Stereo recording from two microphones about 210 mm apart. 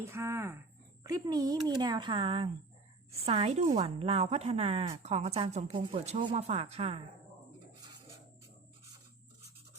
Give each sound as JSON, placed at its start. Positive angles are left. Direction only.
{"t": 0.0, "sound": "speech", "side_deg": -10}